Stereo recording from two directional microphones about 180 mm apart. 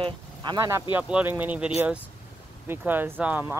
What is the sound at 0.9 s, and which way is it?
Speech, 10° right (ahead or behind).